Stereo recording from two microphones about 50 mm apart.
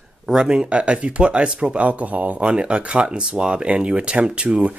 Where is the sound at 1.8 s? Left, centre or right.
Right.